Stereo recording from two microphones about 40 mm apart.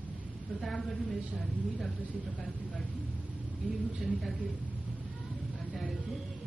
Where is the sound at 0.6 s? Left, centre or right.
Centre.